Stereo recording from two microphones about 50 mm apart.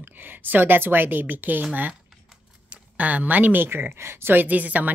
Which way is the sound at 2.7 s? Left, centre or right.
Right.